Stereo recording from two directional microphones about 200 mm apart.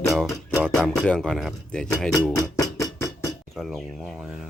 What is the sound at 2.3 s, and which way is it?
Music, 15° left (ahead or behind).